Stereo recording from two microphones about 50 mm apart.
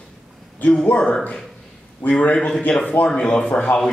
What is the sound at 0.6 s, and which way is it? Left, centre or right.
A man's voice, left.